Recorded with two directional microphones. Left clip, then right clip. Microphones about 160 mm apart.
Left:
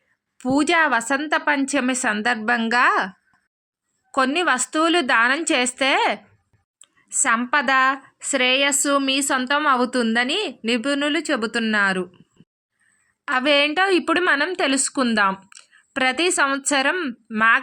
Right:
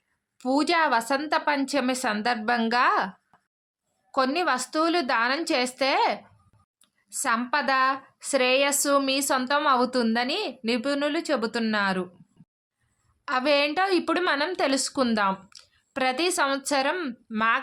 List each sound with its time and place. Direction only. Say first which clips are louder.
0.3 s a woman's voice: left 4 dB; 15° left (ahead or behind)
4.1 s a woman's voice: left 5 dB; 20° left (ahead or behind)
8.3 s a woman's voice: left 3 dB; 5° left (ahead or behind)
13.2 s a woman's voice: left 5 dB; 15° left (ahead or behind)